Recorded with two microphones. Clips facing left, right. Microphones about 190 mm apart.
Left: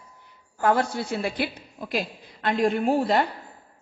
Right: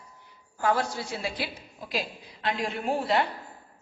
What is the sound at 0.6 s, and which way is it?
A woman's voice, 55° left (ahead or behind).